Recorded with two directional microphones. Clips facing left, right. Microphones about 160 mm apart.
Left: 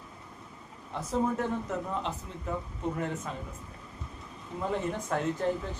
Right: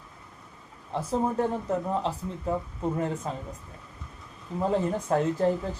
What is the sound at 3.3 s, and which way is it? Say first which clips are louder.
Speech: right 5 dB; 30° right (ahead or behind).